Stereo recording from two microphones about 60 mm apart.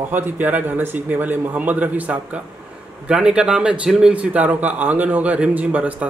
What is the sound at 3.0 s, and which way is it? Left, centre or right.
A man's voice, centre.